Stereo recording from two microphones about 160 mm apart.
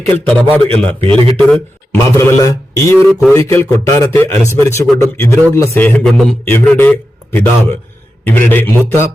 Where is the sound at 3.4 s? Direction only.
20° left (ahead or behind).